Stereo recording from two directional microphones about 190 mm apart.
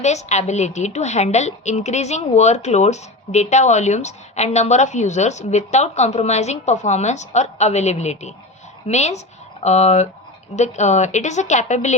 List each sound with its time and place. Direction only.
0.0 s a woman's voice: 35° left (ahead or behind)